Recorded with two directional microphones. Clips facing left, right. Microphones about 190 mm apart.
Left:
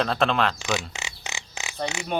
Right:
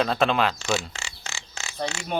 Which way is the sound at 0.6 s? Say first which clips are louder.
Right 1 dB; 15° left (ahead or behind).